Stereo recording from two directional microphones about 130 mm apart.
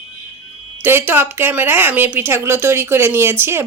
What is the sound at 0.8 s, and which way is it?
A woman's voice, 15° right (ahead or behind).